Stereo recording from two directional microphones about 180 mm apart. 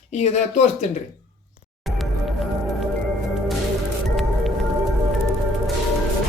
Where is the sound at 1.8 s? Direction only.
Centre (ahead or behind).